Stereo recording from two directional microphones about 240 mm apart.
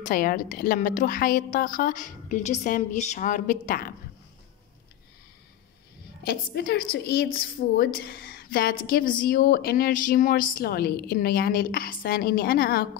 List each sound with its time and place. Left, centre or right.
0.0 s a woman's voice: left
6.2 s a woman's voice: left